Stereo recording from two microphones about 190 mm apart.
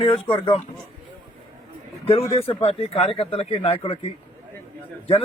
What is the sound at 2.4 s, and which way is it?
Speech, 30° left (ahead or behind).